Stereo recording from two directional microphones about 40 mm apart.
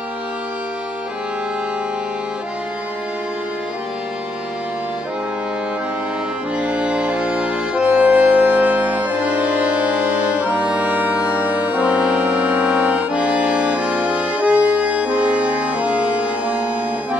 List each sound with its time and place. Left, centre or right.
6.6 s accordion: right